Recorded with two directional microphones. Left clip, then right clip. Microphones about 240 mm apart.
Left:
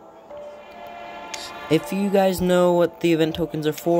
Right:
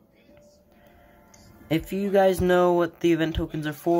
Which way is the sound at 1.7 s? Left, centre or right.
Left.